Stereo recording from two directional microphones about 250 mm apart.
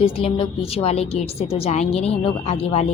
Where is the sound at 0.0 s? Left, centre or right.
Left.